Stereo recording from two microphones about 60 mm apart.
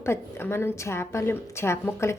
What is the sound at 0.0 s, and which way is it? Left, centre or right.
A woman's voice, left.